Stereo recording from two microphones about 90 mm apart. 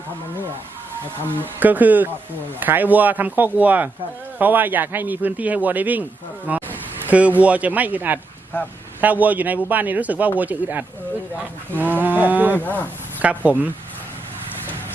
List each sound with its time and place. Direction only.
1.5 s a man's voice: 20° right (ahead or behind)
12.5 s speech: 20° left (ahead or behind)
13.2 s speech: 15° right (ahead or behind)